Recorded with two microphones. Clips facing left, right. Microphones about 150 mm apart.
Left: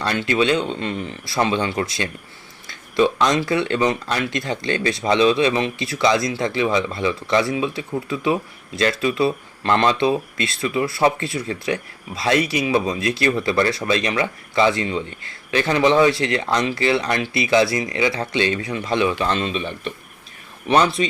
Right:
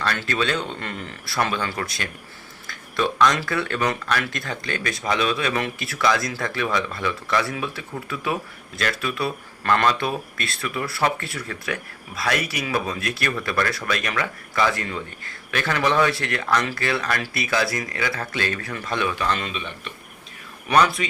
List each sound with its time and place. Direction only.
0.0 s speech: 20° left (ahead or behind)